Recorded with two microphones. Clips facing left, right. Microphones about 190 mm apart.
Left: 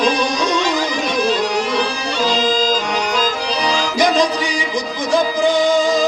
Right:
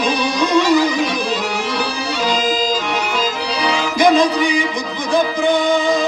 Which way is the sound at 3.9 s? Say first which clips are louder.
Right 4 dB; 55° right (ahead or behind).